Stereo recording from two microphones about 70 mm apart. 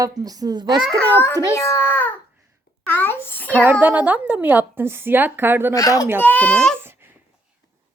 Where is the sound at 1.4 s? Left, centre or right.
Left.